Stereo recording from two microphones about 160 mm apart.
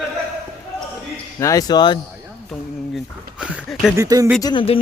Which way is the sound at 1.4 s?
20° left (ahead or behind).